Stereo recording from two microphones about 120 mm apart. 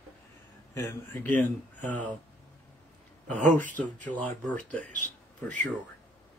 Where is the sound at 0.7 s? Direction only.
20° left (ahead or behind).